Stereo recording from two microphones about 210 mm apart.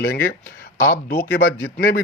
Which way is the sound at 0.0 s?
50° left (ahead or behind).